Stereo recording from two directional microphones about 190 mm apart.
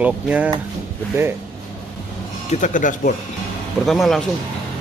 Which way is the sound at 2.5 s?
40° left (ahead or behind).